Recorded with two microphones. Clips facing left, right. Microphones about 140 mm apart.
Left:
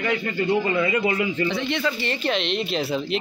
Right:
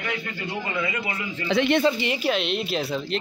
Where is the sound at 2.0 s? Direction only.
10° right (ahead or behind).